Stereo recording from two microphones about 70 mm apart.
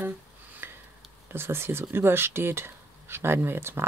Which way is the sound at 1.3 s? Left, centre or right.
Right.